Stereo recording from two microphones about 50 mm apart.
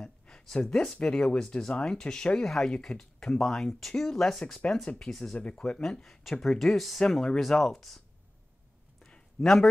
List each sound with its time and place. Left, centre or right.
0.0 s a sound: centre
0.9 s speech: centre
4.6 s speech: left
5.0 s speech: centre
5.3 s speech: left
5.8 s speech: centre
9.4 s speech: centre